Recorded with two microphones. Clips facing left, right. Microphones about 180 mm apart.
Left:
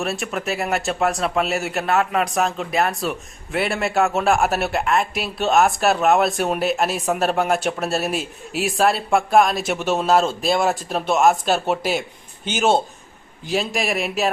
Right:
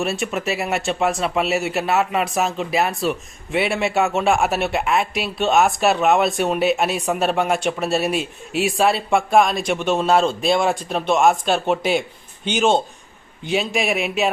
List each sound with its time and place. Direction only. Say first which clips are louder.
0.0 s a man's voice: right 2 dB; centre (ahead or behind)